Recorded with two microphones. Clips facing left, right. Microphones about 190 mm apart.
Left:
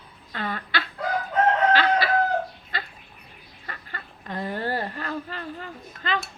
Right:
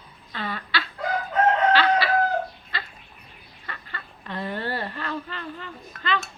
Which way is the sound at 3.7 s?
40° left (ahead or behind).